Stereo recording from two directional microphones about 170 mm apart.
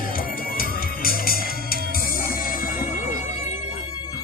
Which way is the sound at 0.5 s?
60° left (ahead or behind).